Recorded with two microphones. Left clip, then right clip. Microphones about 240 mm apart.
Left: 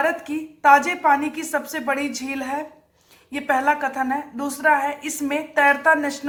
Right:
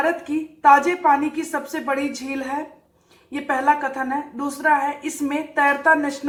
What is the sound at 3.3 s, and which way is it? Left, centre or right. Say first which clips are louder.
A woman's voice: right 1 dB; left.